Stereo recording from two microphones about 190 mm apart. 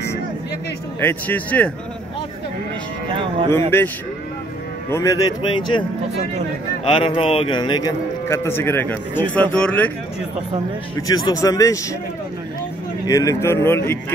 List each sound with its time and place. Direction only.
1.0 s speech: 10° left (ahead or behind)
3.7 s a man's voice: 10° left (ahead or behind)
11.0 s speech: 20° left (ahead or behind)
13.0 s speech: 20° left (ahead or behind)